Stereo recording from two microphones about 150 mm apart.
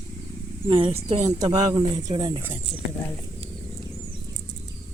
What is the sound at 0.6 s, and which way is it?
Speech, 35° right (ahead or behind).